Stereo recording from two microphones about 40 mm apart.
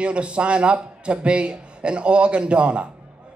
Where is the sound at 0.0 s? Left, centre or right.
Right.